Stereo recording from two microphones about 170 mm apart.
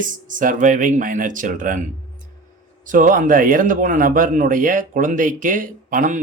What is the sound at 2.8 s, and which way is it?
A man's voice, 50° right (ahead or behind).